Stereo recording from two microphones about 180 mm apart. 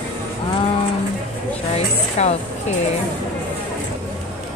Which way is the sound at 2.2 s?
35° left (ahead or behind).